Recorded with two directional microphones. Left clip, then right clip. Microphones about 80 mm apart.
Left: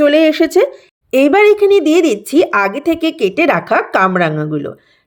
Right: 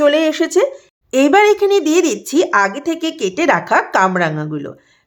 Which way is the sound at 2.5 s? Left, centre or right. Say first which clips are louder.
Left 1 dB; left.